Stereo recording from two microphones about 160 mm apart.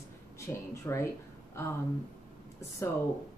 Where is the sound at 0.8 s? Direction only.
15° left (ahead or behind).